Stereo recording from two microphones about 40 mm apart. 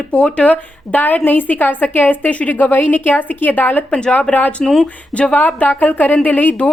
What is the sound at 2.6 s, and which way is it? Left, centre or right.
A woman's voice, left.